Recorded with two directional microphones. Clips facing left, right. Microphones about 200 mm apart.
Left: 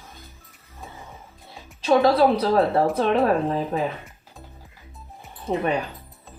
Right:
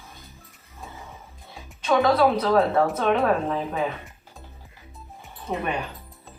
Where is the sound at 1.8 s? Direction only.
30° left (ahead or behind).